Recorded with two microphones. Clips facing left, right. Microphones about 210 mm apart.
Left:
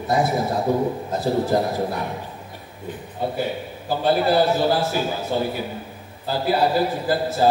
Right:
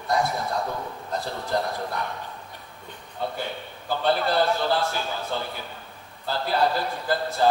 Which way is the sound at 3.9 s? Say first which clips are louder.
Left 5 dB; 10° left (ahead or behind).